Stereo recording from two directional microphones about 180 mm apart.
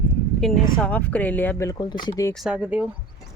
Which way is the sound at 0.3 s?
Centre (ahead or behind).